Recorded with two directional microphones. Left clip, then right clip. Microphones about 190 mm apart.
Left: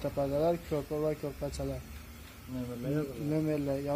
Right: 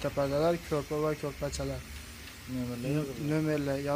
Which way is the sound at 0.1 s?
Centre (ahead or behind).